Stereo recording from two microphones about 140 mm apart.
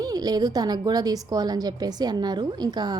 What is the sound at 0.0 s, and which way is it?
A woman's voice, 25° right (ahead or behind).